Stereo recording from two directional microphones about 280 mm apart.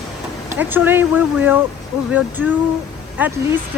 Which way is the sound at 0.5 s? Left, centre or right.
Centre.